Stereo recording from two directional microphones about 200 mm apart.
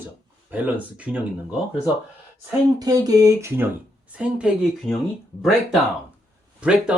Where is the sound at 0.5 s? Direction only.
5° right (ahead or behind).